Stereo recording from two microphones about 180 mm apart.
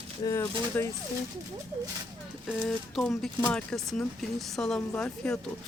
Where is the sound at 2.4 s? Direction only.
Centre (ahead or behind).